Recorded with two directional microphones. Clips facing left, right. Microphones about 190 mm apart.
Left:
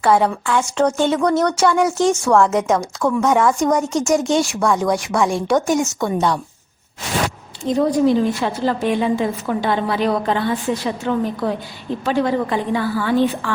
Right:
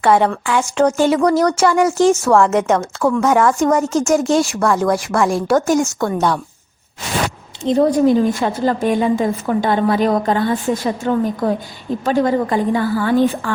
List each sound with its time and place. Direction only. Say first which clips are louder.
0.0 s speech: right 2 dB; centre (ahead or behind)
7.8 s a woman's voice: right 2 dB; 45° right (ahead or behind)